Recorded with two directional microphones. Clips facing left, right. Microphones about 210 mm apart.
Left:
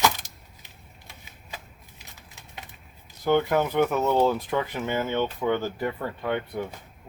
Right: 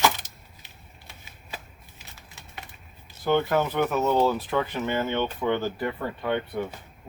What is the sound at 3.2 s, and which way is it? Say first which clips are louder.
Speech: left 1 dB; 15° left (ahead or behind).